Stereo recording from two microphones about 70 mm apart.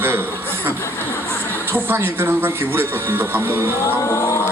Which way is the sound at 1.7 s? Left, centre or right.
Right.